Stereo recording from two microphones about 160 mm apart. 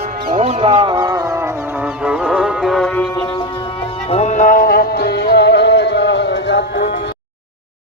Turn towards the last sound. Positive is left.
turn(degrees=90)